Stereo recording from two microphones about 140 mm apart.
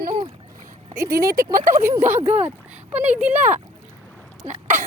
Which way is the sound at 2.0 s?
55° right (ahead or behind).